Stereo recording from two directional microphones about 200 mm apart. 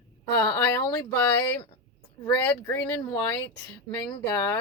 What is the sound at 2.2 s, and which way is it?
Speech, 10° left (ahead or behind).